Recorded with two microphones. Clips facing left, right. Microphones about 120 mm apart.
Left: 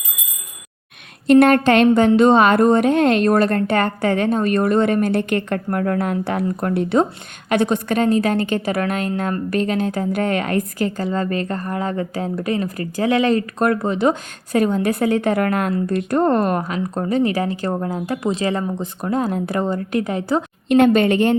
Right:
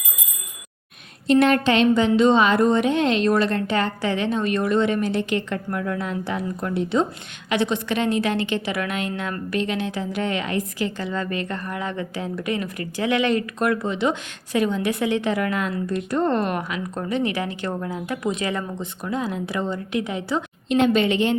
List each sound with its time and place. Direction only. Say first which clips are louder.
1.3 s a woman's voice: left 5 dB; 55° left (ahead or behind)